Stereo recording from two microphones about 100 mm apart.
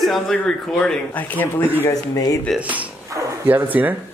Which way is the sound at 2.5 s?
15° right (ahead or behind).